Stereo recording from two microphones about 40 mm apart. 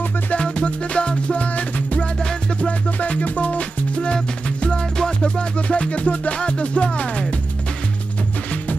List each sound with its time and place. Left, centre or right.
0.3 s music: left
3.0 s music: left
5.2 s music: left